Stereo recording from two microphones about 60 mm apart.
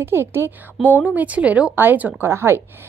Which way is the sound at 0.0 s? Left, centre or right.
Right.